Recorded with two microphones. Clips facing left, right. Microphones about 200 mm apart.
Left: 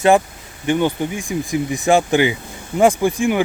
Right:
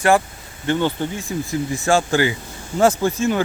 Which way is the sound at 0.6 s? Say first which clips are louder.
Left 2 dB; 15° left (ahead or behind).